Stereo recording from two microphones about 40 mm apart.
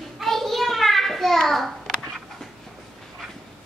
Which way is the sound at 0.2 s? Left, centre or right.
Centre.